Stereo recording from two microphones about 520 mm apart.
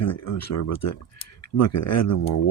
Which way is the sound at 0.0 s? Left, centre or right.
Left.